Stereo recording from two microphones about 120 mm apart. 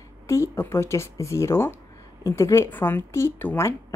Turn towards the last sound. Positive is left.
turn(degrees=20)  # may be behind; listen again after turning